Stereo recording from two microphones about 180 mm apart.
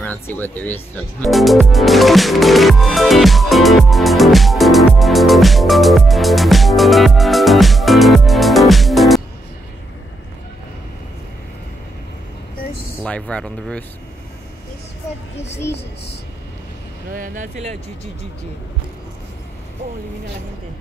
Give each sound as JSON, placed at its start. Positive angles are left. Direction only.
{"t": 0.0, "sound": "music", "side_deg": 10}
{"t": 13.0, "sound": "speech", "side_deg": 5}
{"t": 17.1, "sound": "speech", "side_deg": -45}